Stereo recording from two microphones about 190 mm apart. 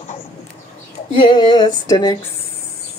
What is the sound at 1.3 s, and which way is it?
Female singing, 20° left (ahead or behind).